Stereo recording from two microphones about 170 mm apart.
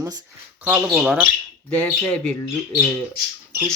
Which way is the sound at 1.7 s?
5° left (ahead or behind).